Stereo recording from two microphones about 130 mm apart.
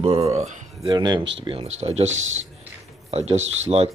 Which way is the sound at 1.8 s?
55° right (ahead or behind).